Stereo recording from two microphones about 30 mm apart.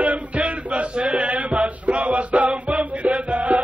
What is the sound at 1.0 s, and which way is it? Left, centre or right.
Music, right.